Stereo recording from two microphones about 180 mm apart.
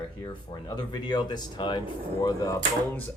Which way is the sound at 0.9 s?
25° left (ahead or behind).